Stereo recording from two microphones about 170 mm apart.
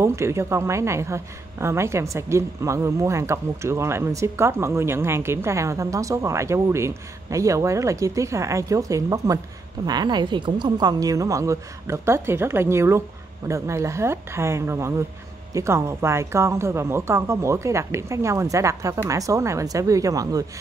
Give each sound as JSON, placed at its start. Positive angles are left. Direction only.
{"t": 0.0, "sound": "a woman's voice", "side_deg": -15}